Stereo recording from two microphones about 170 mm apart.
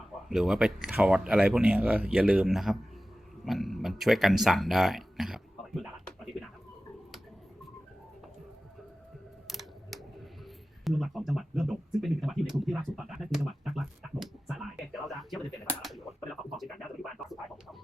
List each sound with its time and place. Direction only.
0.3 s speech: centre (ahead or behind)
9.5 s a sound: centre (ahead or behind)
10.8 s speech: centre (ahead or behind)